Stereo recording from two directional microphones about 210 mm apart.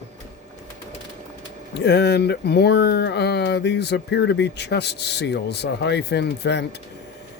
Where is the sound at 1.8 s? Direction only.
55° left (ahead or behind).